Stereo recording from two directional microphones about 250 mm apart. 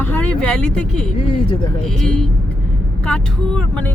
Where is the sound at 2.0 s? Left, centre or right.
Centre.